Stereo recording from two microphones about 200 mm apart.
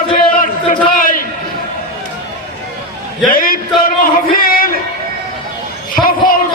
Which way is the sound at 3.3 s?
45° left (ahead or behind).